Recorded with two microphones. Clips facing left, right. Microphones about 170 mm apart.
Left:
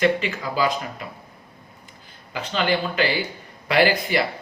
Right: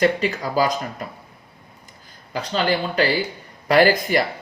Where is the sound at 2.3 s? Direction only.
35° right (ahead or behind).